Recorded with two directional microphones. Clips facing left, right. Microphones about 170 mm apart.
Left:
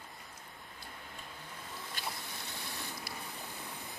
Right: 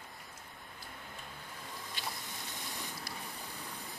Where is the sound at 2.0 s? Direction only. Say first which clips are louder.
Left 1 dB; 45° left (ahead or behind).